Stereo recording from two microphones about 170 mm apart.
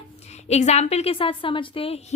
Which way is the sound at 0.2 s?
40° left (ahead or behind).